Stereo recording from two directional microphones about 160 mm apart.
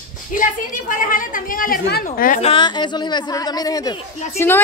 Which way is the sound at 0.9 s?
60° left (ahead or behind).